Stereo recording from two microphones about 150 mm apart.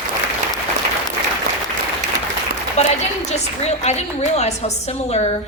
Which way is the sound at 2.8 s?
50° left (ahead or behind).